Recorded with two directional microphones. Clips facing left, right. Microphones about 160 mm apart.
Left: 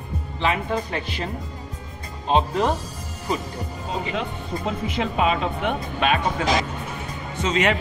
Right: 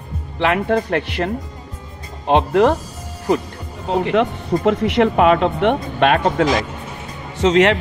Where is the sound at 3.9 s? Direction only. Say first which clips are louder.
Right 11 dB; 65° right (ahead or behind).